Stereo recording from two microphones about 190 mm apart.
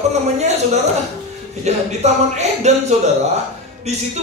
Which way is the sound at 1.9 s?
35° right (ahead or behind).